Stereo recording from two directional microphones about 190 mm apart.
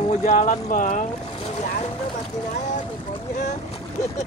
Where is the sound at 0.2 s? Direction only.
40° left (ahead or behind).